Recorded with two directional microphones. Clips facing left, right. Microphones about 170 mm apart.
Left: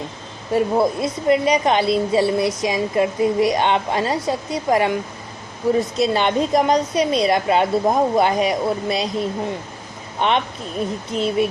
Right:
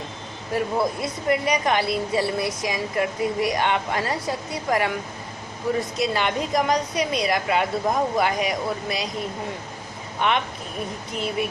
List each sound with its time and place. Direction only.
0.5 s a woman's voice: 25° left (ahead or behind)
6.0 s a woman's voice: 25° left (ahead or behind)
10.2 s a woman's voice: 25° left (ahead or behind)